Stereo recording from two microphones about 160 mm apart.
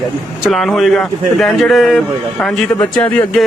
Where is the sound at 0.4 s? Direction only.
Centre (ahead or behind).